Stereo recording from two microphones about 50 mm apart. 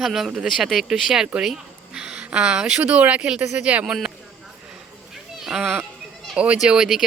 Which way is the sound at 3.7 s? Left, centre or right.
Right.